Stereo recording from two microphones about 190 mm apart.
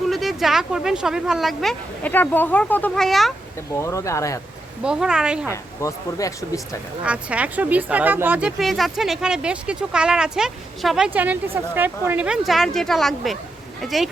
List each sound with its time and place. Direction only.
0.1 s speech: centre (ahead or behind)
3.8 s speech: 15° left (ahead or behind)
4.8 s speech: 5° right (ahead or behind)
5.8 s speech: 15° left (ahead or behind)
7.0 s speech: 5° right (ahead or behind)